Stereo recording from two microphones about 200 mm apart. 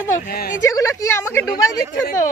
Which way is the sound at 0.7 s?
15° left (ahead or behind).